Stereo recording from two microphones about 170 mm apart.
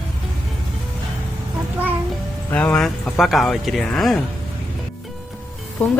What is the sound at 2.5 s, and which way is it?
Speech, 10° left (ahead or behind).